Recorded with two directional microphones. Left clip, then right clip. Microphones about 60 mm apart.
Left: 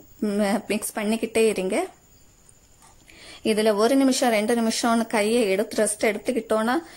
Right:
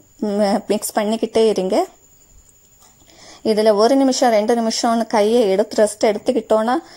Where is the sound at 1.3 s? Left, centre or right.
Right.